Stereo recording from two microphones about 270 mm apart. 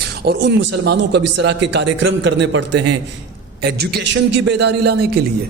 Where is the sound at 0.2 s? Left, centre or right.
Right.